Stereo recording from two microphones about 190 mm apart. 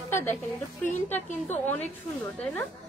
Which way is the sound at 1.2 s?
40° left (ahead or behind).